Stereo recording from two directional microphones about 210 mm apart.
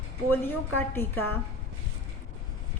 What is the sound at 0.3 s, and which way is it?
Speech, 10° left (ahead or behind).